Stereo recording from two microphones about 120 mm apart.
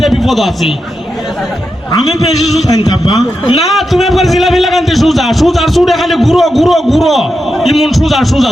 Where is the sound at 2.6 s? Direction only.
30° left (ahead or behind).